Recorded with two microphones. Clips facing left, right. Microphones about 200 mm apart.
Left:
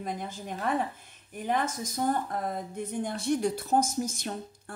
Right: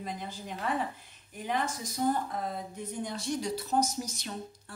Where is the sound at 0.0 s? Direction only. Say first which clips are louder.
Left 3 dB; 50° left (ahead or behind).